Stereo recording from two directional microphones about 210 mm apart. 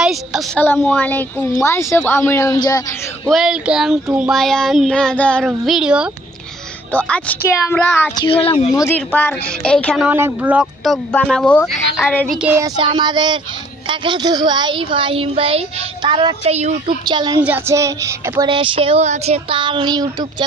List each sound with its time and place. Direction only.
0.6 s a woman's voice: 10° left (ahead or behind)
3.3 s speech: centre (ahead or behind)
6.9 s a woman's voice: 5° left (ahead or behind)
8.2 s a woman's voice: 25° left (ahead or behind)
8.7 s a woman's voice: 10° left (ahead or behind)
10.0 s speech: 10° right (ahead or behind); by 12.4 s 5° left (ahead or behind)
12.4 s a woman's voice: 15° right (ahead or behind)
17.0 s a woman's voice: 20° right (ahead or behind)
17.4 s a woman's voice: 10° right (ahead or behind)